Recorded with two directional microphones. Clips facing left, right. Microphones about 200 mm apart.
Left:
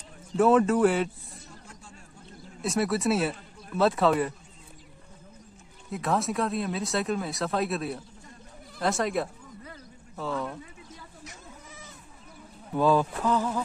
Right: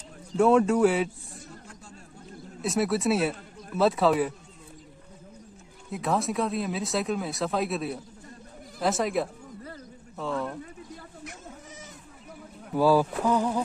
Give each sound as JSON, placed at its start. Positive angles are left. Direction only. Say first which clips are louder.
{"t": 0.4, "sound": "speech", "louder": "right 1 dB", "side_deg": 0}
{"t": 2.6, "sound": "speech", "louder": "right 1 dB", "side_deg": 0}
{"t": 5.9, "sound": "speech", "louder": "even", "side_deg": 0}
{"t": 10.6, "sound": "a sound", "louder": "right 5 dB", "side_deg": -50}
{"t": 12.7, "sound": "speech", "louder": "right 2 dB", "side_deg": -10}